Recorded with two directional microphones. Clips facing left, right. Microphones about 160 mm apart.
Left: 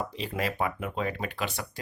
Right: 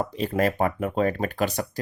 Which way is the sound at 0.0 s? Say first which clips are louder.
Right 8 dB; 45° right (ahead or behind).